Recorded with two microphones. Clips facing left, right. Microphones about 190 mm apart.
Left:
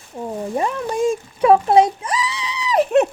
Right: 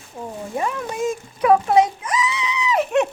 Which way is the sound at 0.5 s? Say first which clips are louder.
Left 3 dB; 35° left (ahead or behind).